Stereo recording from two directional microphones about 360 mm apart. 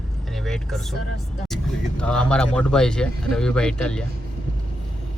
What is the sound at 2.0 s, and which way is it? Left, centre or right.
Speech, centre.